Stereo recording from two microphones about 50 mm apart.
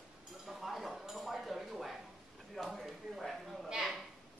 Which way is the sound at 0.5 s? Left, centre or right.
Centre.